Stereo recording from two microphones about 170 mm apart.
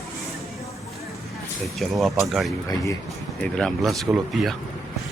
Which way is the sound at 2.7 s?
20° left (ahead or behind).